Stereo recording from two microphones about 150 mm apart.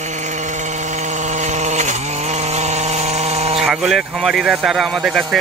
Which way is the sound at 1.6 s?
50° right (ahead or behind).